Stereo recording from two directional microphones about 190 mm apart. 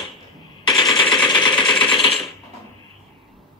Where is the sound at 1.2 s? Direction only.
25° left (ahead or behind).